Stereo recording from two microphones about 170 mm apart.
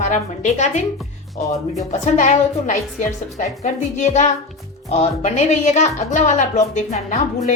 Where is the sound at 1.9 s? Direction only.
45° left (ahead or behind).